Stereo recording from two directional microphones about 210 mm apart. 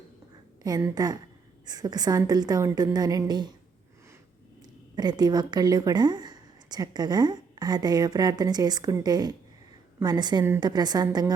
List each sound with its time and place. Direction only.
0.6 s a woman's voice: 20° right (ahead or behind)
4.9 s a woman's voice: 20° right (ahead or behind)